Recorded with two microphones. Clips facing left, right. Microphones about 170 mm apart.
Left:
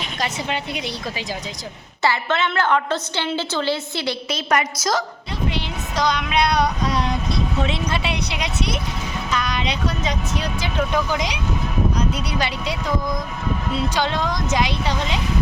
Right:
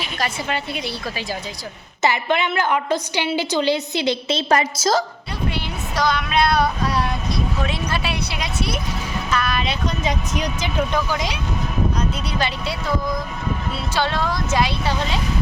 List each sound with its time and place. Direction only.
0.2 s speech: 15° left (ahead or behind)
2.0 s a woman's voice: 15° right (ahead or behind)
5.5 s child singing: 20° left (ahead or behind)
7.6 s a woman's voice: 20° left (ahead or behind)
10.0 s a woman's voice: 10° right (ahead or behind)
10.9 s speech: 15° left (ahead or behind)
13.7 s speech: 15° left (ahead or behind)